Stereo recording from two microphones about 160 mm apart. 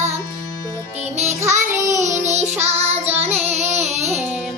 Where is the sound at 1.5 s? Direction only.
50° right (ahead or behind).